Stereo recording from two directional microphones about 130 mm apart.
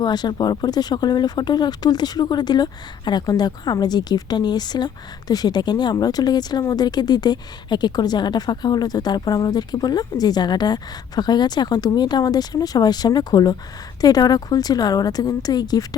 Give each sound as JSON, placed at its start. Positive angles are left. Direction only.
{"t": 0.0, "sound": "a woman's voice", "side_deg": 35}